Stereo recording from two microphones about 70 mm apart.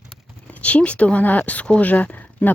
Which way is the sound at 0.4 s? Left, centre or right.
Centre.